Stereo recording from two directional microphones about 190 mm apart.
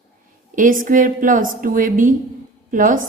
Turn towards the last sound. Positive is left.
turn(degrees=-45)  # may be behind; listen again after turning